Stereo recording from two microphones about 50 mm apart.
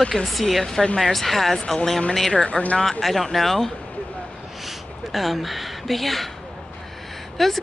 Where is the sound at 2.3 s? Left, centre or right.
Left.